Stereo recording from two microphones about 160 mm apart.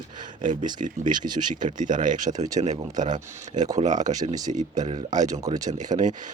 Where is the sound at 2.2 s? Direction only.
20° right (ahead or behind).